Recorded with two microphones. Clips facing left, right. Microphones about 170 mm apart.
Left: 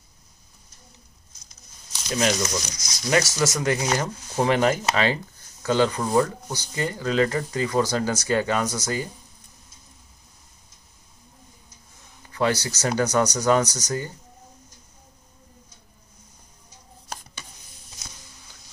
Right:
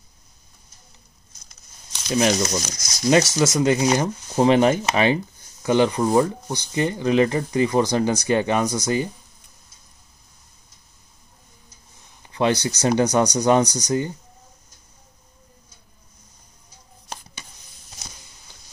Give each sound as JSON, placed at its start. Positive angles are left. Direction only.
{"t": 2.1, "sound": "speech", "side_deg": -25}
{"t": 12.3, "sound": "speech", "side_deg": -20}